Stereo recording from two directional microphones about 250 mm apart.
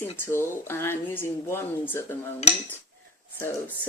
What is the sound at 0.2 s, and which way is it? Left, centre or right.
Speech, centre.